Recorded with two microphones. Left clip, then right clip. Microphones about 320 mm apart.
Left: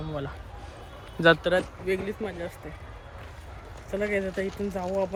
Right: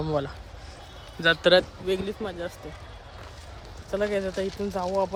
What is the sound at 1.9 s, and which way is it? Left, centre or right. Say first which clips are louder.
Speech: right 1 dB; centre.